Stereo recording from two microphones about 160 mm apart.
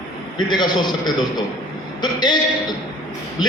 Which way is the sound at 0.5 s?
25° left (ahead or behind).